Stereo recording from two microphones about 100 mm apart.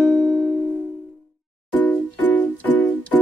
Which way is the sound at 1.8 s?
20° left (ahead or behind).